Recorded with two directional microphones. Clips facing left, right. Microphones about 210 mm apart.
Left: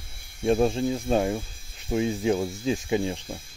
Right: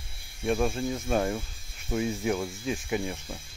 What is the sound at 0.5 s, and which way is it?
Speech, 30° left (ahead or behind).